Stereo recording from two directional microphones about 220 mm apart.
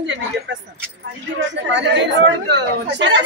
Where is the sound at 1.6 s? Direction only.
55° right (ahead or behind).